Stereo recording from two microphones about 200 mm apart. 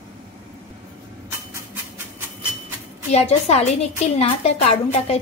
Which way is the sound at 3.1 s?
35° left (ahead or behind).